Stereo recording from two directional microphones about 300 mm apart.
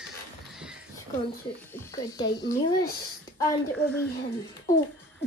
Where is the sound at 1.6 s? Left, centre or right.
Centre.